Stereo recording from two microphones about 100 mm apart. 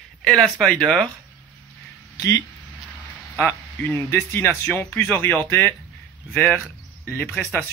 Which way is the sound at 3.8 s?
25° left (ahead or behind).